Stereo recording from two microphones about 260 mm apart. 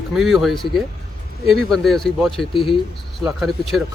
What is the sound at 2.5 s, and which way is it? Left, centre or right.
Speech, centre.